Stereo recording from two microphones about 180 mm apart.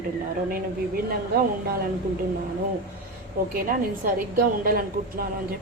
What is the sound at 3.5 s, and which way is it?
A woman's voice, 50° right (ahead or behind).